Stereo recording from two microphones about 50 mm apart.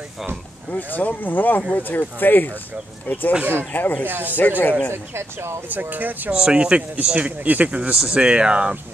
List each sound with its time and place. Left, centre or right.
0.7 s speech: left
4.1 s speech: right
4.4 s speech: left
4.9 s speech: right
5.7 s speech: right
6.3 s speech: centre
8.1 s speech: centre